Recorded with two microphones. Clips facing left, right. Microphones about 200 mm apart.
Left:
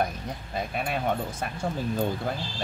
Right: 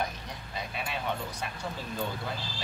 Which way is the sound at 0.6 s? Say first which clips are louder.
Left 6 dB; 50° left (ahead or behind).